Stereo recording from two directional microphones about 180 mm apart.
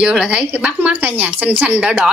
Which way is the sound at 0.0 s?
5° right (ahead or behind).